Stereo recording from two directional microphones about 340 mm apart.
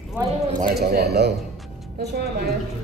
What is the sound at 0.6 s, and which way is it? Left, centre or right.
Speech, right.